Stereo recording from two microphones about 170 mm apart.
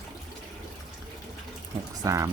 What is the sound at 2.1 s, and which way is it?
Speech, 20° right (ahead or behind).